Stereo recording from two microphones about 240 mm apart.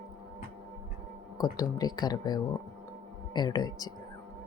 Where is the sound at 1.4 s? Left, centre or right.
Centre.